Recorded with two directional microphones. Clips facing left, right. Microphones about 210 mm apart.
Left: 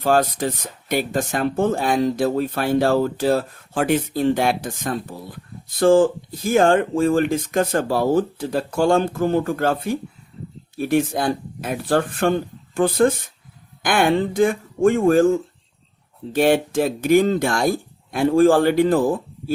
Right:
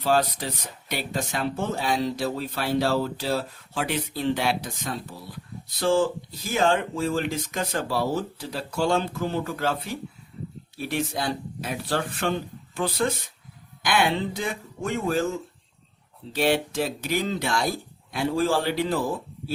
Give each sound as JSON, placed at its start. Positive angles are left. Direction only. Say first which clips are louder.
{"t": 0.0, "sound": "speech", "louder": "left 5 dB", "side_deg": 50}